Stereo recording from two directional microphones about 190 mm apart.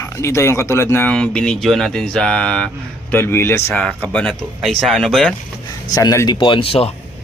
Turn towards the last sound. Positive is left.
turn(degrees=30)  # may be behind; listen again after turning